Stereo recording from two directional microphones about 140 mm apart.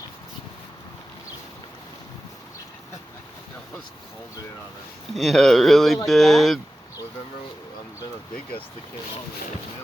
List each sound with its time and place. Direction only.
5.1 s speech: centre (ahead or behind)